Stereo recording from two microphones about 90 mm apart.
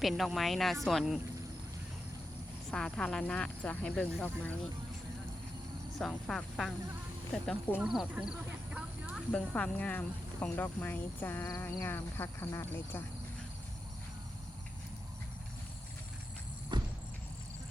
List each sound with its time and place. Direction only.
0.0 s speech: centre (ahead or behind)
2.6 s speech: 5° left (ahead or behind)
6.0 s speech: 5° left (ahead or behind)
7.8 s speech: 5° right (ahead or behind)
8.7 s a sound: 10° right (ahead or behind)
9.3 s speech: 15° left (ahead or behind)
16.7 s a sound: 55° right (ahead or behind)